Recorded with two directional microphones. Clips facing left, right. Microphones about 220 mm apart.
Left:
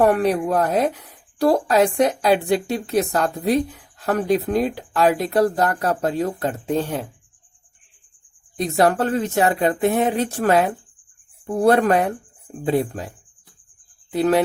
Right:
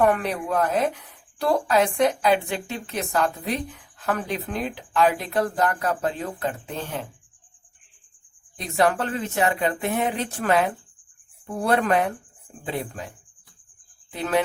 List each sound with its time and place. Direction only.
0.0 s speech: 40° left (ahead or behind)
8.5 s speech: 40° left (ahead or behind)
14.1 s speech: 40° left (ahead or behind)